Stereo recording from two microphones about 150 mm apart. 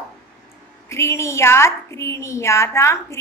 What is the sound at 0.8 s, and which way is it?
A woman's voice, 20° left (ahead or behind).